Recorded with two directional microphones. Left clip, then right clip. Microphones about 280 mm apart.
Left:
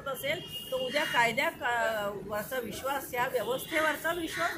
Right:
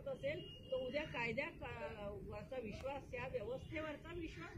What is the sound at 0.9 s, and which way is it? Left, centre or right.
Speech, left.